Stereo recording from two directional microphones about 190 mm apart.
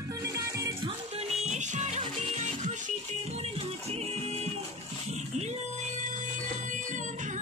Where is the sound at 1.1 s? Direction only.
35° right (ahead or behind).